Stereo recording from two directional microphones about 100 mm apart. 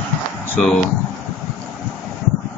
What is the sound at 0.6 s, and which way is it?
Speech, 5° left (ahead or behind).